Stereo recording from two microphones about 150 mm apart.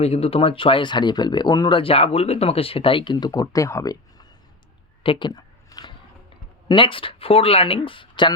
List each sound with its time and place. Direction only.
0.0 s speech: 40° left (ahead or behind); by 4.3 s 20° left (ahead or behind)
5.0 s a sound: 30° left (ahead or behind)
6.7 s speech: 35° left (ahead or behind)